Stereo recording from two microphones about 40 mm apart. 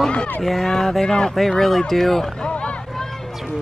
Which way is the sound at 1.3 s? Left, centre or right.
Centre.